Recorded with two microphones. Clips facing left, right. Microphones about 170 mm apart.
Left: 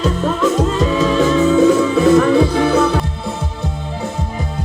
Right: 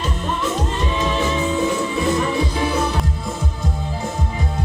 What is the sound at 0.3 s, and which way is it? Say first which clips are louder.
Music: left 7 dB; 90° left.